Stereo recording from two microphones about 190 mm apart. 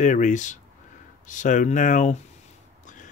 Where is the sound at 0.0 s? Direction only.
40° left (ahead or behind).